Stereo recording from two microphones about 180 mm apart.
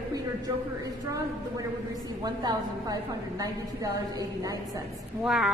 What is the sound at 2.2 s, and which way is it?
A woman's voice, 20° right (ahead or behind).